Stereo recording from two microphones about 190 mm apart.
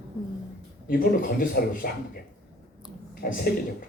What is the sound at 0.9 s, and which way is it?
Speech, 45° left (ahead or behind).